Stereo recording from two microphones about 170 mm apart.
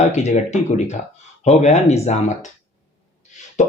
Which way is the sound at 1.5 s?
40° left (ahead or behind).